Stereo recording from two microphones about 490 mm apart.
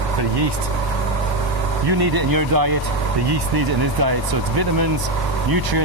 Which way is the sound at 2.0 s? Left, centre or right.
Right.